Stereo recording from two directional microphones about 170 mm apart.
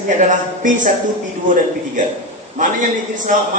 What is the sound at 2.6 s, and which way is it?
Speech, 45° right (ahead or behind).